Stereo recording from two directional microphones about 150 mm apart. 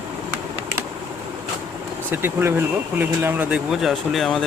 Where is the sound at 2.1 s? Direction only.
15° right (ahead or behind).